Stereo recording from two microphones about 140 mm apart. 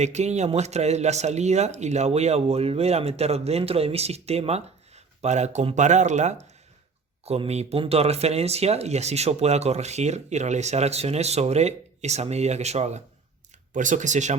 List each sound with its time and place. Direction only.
0.0 s speech: 55° right (ahead or behind)
13.7 s speech: 65° right (ahead or behind)